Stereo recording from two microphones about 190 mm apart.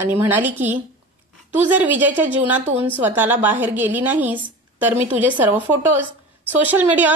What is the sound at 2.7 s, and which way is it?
Speech, 30° right (ahead or behind).